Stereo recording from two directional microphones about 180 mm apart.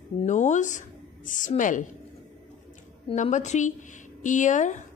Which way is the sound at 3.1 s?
40° left (ahead or behind).